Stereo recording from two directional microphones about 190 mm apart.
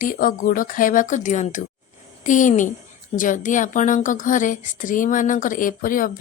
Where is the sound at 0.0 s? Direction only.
45° left (ahead or behind).